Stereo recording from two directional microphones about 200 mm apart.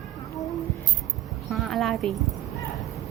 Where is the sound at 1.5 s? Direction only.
Centre (ahead or behind).